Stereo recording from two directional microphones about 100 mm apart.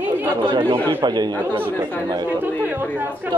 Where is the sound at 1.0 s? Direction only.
45° right (ahead or behind).